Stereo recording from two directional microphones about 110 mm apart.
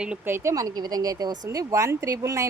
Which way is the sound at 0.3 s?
25° right (ahead or behind).